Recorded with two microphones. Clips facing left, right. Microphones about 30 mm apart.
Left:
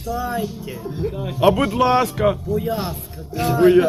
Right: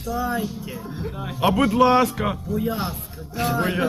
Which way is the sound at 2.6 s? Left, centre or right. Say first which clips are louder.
Left 2 dB; centre.